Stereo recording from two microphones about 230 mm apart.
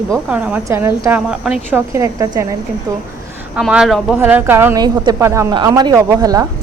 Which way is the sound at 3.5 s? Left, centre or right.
Centre.